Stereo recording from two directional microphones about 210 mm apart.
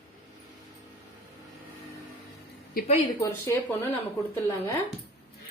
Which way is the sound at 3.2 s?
15° left (ahead or behind).